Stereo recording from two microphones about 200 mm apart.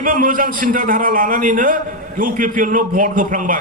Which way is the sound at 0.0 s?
45° right (ahead or behind).